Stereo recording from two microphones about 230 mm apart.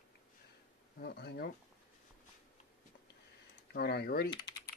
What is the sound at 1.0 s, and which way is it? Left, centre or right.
Speech, left.